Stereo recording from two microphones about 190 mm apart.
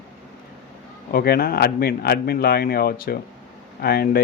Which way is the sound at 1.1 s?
55° left (ahead or behind).